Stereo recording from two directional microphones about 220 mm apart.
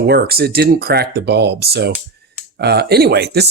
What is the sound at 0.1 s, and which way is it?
Speech, 45° right (ahead or behind).